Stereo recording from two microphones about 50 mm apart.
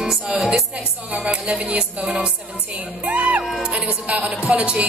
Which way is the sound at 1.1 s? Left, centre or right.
Right.